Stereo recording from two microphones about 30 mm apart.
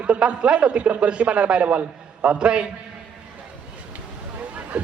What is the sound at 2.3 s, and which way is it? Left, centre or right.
Speech, right.